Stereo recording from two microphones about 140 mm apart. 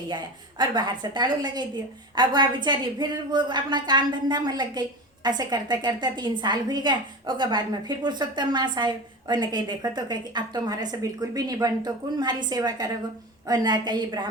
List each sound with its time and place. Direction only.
0.6 s a woman's voice: 35° right (ahead or behind)